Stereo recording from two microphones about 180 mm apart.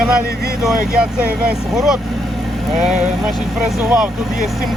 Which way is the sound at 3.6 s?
5° right (ahead or behind).